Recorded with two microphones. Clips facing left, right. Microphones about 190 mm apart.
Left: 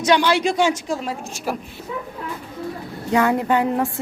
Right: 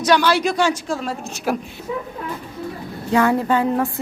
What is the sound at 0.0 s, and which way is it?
A woman's voice, 20° left (ahead or behind).